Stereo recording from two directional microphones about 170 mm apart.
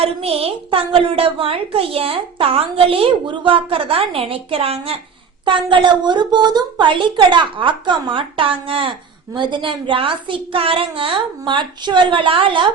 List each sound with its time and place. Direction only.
0.0 s a woman's voice: 35° right (ahead or behind)